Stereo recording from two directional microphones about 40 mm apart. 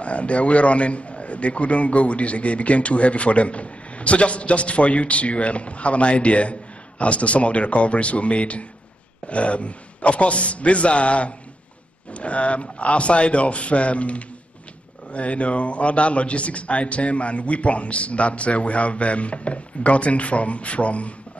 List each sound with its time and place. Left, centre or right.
0.0 s a man's voice: left